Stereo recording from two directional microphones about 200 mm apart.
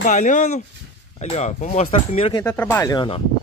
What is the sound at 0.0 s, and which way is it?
Speech, 40° left (ahead or behind).